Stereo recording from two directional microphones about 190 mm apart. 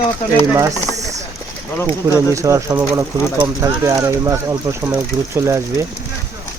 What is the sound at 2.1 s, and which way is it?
Speech, 15° right (ahead or behind).